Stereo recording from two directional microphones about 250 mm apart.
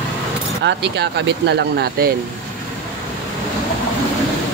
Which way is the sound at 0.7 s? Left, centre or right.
Right.